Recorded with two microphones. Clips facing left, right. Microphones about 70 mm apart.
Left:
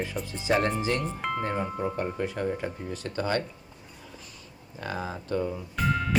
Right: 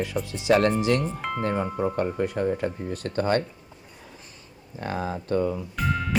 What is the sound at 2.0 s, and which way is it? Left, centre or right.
Speech, right.